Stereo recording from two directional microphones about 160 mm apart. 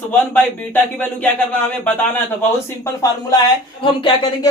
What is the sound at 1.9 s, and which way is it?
Speech, 10° left (ahead or behind).